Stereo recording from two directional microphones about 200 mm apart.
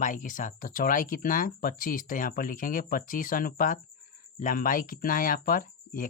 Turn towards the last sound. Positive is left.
turn(degrees=45)  # may be behind; listen again after turning